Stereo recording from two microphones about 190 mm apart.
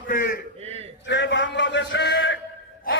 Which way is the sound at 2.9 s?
50° left (ahead or behind).